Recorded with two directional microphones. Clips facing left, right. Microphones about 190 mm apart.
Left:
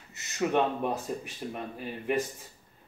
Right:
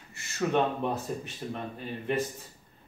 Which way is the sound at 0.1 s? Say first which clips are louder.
Even; 20° left (ahead or behind).